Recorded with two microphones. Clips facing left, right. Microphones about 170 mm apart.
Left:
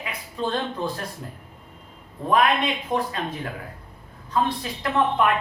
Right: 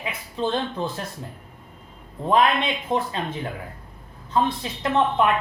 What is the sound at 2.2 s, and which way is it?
Speech, 25° right (ahead or behind).